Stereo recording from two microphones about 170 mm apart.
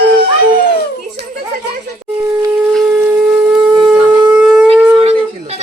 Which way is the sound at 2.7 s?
10° right (ahead or behind).